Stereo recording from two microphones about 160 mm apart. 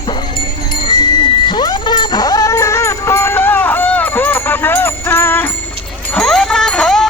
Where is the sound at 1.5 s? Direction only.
30° left (ahead or behind).